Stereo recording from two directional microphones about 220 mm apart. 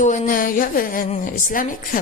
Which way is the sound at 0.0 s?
35° left (ahead or behind).